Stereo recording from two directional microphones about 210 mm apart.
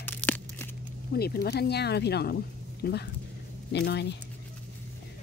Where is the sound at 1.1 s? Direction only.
45° left (ahead or behind).